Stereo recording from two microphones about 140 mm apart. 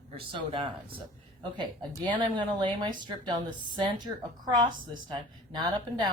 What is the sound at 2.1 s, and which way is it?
Speech, 35° right (ahead or behind).